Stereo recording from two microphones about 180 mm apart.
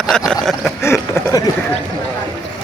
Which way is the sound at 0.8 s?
15° left (ahead or behind).